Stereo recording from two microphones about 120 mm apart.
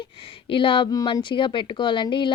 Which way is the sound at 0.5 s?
45° left (ahead or behind).